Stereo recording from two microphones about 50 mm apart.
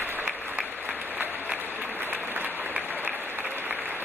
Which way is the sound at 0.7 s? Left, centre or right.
Right.